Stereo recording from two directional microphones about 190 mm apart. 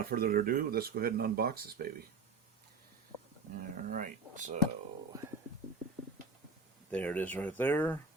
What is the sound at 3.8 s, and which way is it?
Speech, 45° right (ahead or behind).